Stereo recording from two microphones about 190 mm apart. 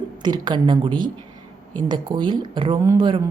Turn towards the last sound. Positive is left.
turn(degrees=-25)  # may be behind; listen again after turning